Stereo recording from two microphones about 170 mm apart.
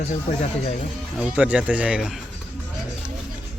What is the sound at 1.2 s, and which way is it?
Speech, 10° right (ahead or behind).